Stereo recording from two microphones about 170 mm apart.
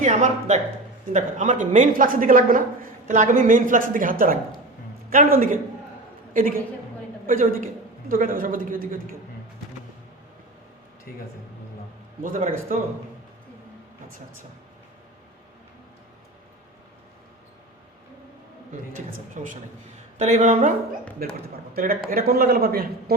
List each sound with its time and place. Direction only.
0.0 s a woman's voice: 45° right (ahead or behind)
11.1 s speech: 60° left (ahead or behind)
12.2 s a woman's voice: 55° right (ahead or behind)
18.9 s a woman's voice: 50° right (ahead or behind)
21.7 s a man's voice: 60° right (ahead or behind)